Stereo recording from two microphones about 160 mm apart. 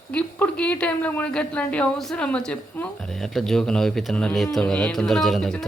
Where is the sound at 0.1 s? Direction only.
10° left (ahead or behind).